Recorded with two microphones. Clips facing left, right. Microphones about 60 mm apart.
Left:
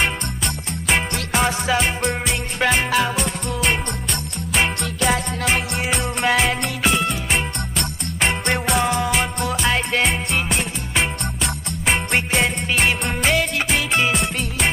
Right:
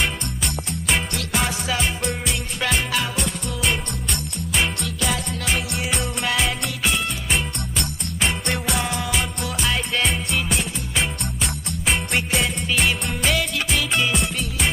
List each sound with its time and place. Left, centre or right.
2.9 s music: centre
4.6 s music: left
8.2 s music: left
10.3 s music: left
12.4 s music: left